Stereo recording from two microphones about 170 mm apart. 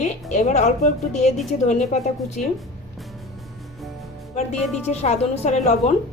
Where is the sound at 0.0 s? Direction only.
45° left (ahead or behind).